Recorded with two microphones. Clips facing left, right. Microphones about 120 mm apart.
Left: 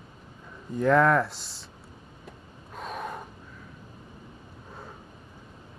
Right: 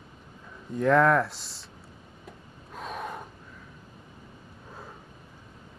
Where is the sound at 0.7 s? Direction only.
Centre (ahead or behind).